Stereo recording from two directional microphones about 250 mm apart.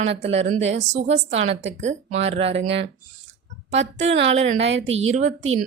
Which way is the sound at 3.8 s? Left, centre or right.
Right.